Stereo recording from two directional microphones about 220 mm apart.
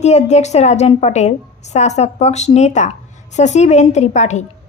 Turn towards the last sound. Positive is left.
turn(degrees=30)  # may be behind; listen again after turning